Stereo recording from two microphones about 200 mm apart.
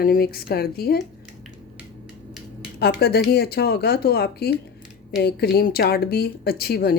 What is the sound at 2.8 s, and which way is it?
Speech, 50° left (ahead or behind).